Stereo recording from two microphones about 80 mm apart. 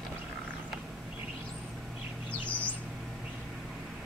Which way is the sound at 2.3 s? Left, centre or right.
Centre.